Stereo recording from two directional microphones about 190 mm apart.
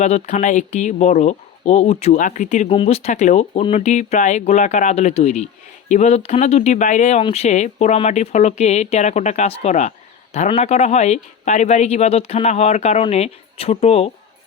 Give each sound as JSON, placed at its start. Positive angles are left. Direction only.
{"t": 0.0, "sound": "speech", "side_deg": 40}